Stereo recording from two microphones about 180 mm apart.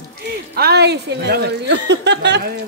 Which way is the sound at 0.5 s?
65° right (ahead or behind).